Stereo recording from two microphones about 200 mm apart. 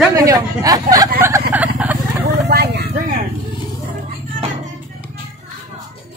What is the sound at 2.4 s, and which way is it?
Vehicle, 55° right (ahead or behind).